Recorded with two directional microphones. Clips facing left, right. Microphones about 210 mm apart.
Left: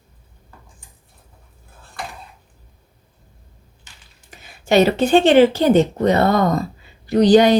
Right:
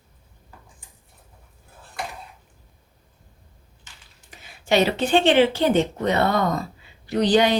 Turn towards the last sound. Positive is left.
turn(degrees=40)  # may be behind; listen again after turning